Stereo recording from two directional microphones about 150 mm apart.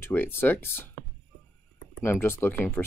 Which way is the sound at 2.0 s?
15° left (ahead or behind).